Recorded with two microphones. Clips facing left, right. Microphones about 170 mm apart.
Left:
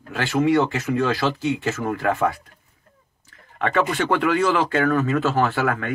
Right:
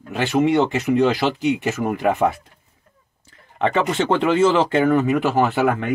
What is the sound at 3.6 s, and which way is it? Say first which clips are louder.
Speech: right 2 dB; 20° right (ahead or behind).